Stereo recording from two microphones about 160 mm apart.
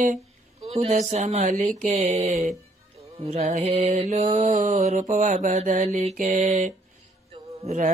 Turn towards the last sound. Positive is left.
turn(degrees=-45)  # may be behind; listen again after turning